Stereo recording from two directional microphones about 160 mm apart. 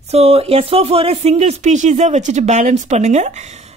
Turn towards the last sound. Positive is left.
turn(degrees=-45)  # may be behind; listen again after turning